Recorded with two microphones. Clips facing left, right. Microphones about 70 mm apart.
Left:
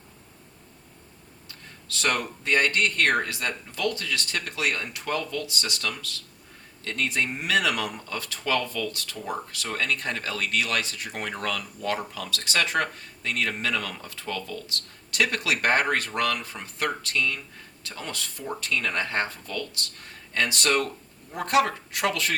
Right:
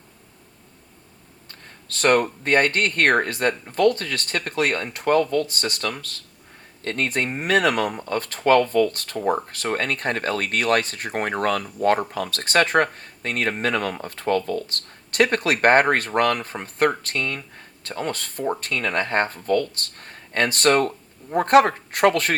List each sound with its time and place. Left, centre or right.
1.5 s speech: right